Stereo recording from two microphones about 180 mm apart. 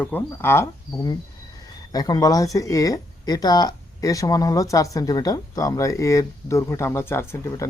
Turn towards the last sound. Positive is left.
turn(degrees=15)  # may be behind; listen again after turning